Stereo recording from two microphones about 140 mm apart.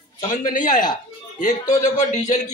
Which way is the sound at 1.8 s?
60° left (ahead or behind).